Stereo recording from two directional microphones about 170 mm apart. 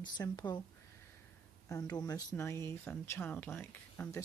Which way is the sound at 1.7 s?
20° left (ahead or behind).